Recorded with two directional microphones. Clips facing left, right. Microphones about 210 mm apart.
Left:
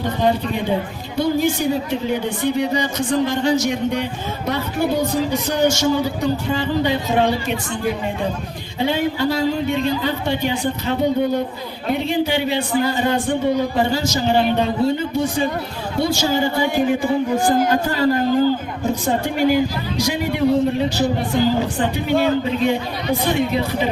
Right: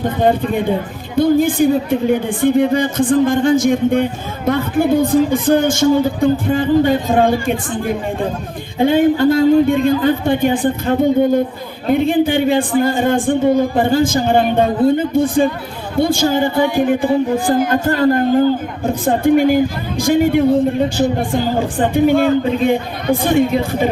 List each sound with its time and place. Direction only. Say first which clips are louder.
0.0 s speech: right 4 dB; 55° right (ahead or behind)
8.8 s speech: right 8 dB; 50° right (ahead or behind)